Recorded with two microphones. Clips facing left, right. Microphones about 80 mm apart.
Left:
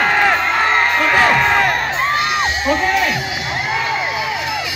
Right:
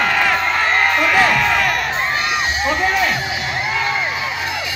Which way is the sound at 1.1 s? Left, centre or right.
Left.